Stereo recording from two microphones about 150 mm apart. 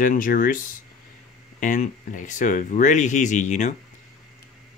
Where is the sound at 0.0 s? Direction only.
65° left (ahead or behind).